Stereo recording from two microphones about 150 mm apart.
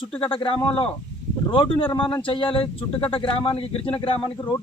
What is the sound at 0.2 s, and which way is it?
Speech, 35° left (ahead or behind).